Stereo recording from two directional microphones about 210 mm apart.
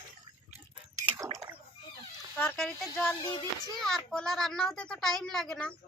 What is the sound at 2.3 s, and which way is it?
Speech, 5° left (ahead or behind).